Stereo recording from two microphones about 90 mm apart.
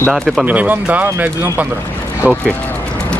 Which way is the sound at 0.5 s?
15° right (ahead or behind).